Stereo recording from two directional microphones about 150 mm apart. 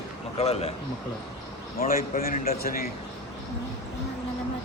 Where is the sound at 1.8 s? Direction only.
70° left (ahead or behind).